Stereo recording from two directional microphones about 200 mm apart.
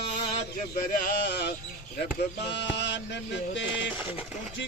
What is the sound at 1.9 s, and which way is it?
Music, 55° left (ahead or behind).